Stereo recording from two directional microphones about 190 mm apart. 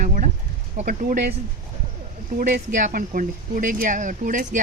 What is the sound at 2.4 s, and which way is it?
Speech, 50° right (ahead or behind).